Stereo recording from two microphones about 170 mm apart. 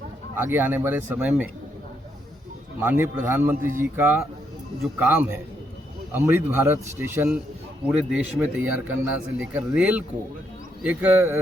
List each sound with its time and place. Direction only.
0.3 s speech: 10° right (ahead or behind)
2.8 s speech: 10° right (ahead or behind)